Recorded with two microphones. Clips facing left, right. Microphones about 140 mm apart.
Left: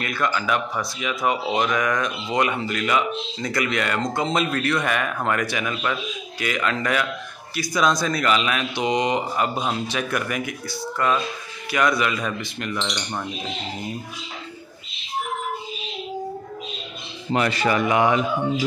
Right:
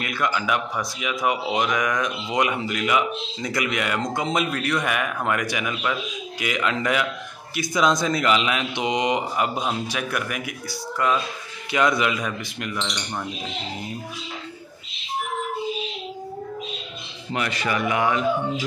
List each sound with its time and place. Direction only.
0.0 s speech: 15° right (ahead or behind)
11.7 s a man's voice: 20° right (ahead or behind)
12.3 s speech: 5° right (ahead or behind)
17.3 s speech: 35° left (ahead or behind)